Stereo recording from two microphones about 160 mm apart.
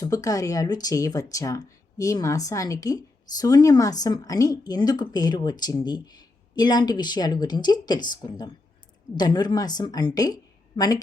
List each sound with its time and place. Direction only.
0.0 s speech: 20° left (ahead or behind)